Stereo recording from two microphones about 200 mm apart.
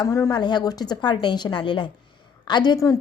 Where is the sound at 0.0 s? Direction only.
20° left (ahead or behind).